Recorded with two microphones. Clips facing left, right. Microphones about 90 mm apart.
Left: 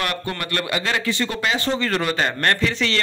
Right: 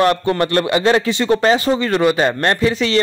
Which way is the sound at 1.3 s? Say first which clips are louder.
Right 10 dB; 35° right (ahead or behind).